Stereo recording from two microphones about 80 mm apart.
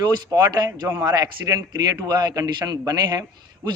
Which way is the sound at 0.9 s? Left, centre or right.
Right.